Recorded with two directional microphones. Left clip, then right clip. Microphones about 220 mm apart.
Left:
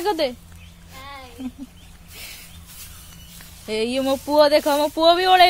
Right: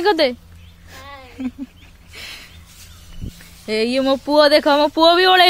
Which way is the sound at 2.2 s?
40° right (ahead or behind).